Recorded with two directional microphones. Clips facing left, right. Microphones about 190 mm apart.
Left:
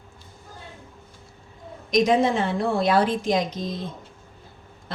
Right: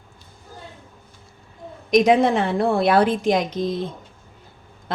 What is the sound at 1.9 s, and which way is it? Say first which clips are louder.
A woman's voice: right 4 dB; 60° right (ahead or behind).